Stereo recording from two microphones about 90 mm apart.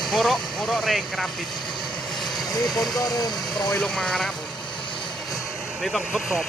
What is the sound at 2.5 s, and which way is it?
Speech, 45° left (ahead or behind).